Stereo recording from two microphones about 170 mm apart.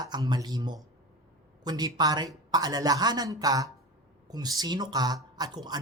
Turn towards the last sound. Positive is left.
turn(degrees=-25)  # may be behind; listen again after turning